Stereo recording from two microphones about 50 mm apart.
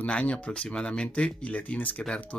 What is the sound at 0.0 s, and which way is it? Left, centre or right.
Speech, left.